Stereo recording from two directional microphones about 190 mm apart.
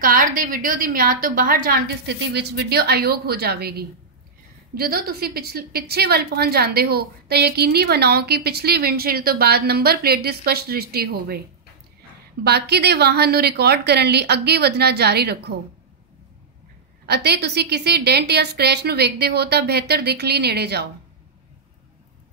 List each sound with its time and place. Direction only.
0.0 s a woman's voice: 45° right (ahead or behind)
2.0 s a woman's voice: 60° right (ahead or behind)
12.4 s a woman's voice: 60° right (ahead or behind)
17.0 s a woman's voice: 60° right (ahead or behind)